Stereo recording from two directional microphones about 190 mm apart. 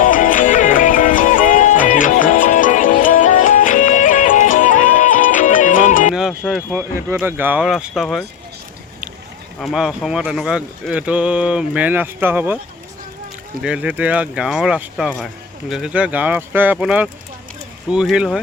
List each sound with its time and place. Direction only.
0.0 s music: 45° left (ahead or behind)
6.1 s music: centre (ahead or behind)
7.1 s speech: 10° right (ahead or behind)
9.6 s speech: centre (ahead or behind)
13.6 s speech: 5° right (ahead or behind)